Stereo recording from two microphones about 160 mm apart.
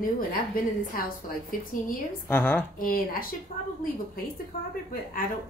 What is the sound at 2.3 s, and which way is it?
Speech, 10° left (ahead or behind).